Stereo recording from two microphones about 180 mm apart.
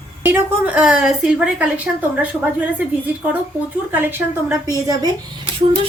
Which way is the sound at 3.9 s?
10° right (ahead or behind).